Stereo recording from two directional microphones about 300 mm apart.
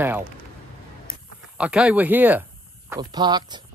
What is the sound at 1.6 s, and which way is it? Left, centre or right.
Speech, centre.